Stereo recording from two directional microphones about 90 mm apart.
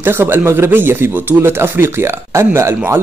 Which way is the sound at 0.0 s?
25° right (ahead or behind).